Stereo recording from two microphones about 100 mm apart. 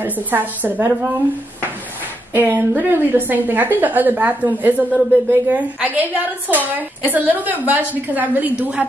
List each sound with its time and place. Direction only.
0.0 s a woman's voice: 20° right (ahead or behind)
2.3 s a woman's voice: 20° right (ahead or behind)